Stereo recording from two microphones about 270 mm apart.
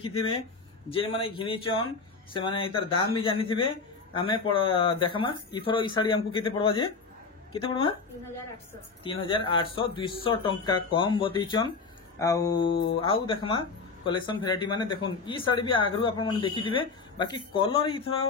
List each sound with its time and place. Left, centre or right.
0.0 s speech: centre
9.0 s speech: centre